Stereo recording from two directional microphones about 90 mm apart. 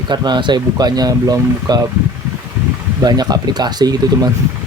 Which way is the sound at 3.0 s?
45° right (ahead or behind).